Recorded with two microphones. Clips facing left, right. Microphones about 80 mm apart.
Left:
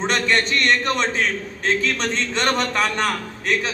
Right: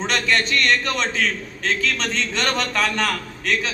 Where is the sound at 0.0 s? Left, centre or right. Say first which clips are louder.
Left 1 dB; left.